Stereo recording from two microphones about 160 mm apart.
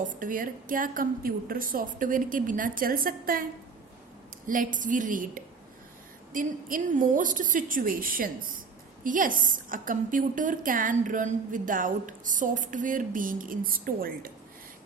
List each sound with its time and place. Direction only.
0.0 s a woman's voice: 55° right (ahead or behind)
4.4 s a woman's voice: 55° right (ahead or behind)